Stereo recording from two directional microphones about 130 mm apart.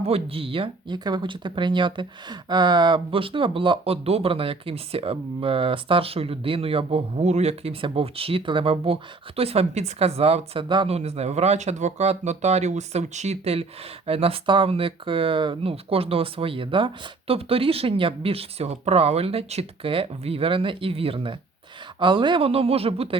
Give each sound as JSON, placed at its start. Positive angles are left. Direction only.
{"t": 0.1, "sound": "speech", "side_deg": -45}
{"t": 10.8, "sound": "speech", "side_deg": -55}